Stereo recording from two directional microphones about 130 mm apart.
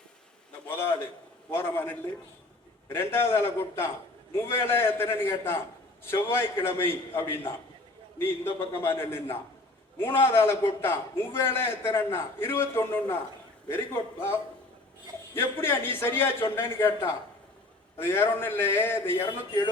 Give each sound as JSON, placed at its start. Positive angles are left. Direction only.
{"t": 0.7, "sound": "a man's voice", "side_deg": 20}
{"t": 15.4, "sound": "a man's voice", "side_deg": 20}